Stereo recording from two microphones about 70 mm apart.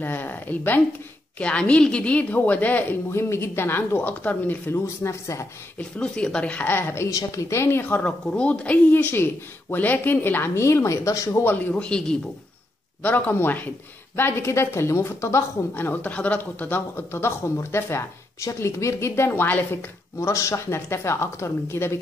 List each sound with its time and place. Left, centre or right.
0.0 s a woman's voice: left
1.4 s a woman's voice: centre
3.1 s speech: left
4.8 s a woman's voice: left
5.8 s speech: centre
6.7 s speech: left
7.1 s a woman's voice: left
8.0 s speech: centre
8.9 s speech: left
11.7 s speech: centre
13.0 s a woman's voice: left
15.7 s speech: left
20.2 s speech: left